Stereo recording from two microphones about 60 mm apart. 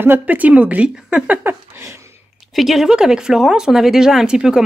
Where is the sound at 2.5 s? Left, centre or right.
Centre.